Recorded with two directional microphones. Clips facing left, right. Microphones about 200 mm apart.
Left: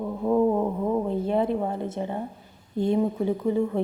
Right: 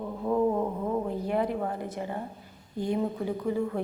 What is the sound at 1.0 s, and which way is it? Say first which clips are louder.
A woman's voice: left 4 dB; 25° left (ahead or behind).